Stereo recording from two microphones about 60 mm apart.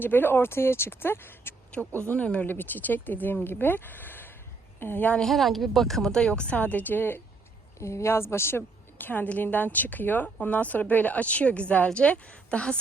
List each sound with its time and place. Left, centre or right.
0.0 s a woman's voice: left
2.0 s a woman's voice: left
2.5 s a woman's voice: left
5.1 s a woman's voice: centre; by 7.2 s left
7.8 s a woman's voice: left; by 12.7 s centre